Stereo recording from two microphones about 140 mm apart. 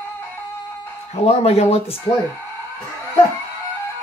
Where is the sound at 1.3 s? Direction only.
50° left (ahead or behind).